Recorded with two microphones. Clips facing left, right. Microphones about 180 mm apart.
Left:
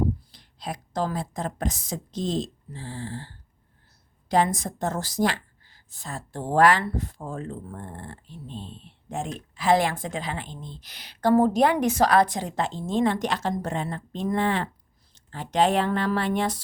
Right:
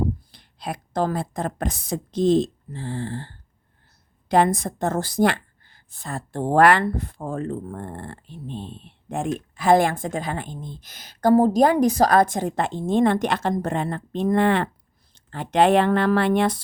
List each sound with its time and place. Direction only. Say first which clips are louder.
0.3 s a woman's voice: right 3 dB; 60° right (ahead or behind)